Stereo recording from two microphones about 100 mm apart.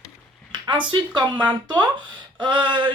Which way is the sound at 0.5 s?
50° right (ahead or behind).